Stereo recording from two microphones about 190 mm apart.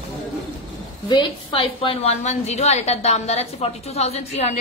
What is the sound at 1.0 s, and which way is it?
A woman's voice, 25° left (ahead or behind).